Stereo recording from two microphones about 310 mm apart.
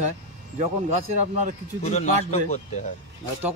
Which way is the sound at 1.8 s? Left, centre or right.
Left.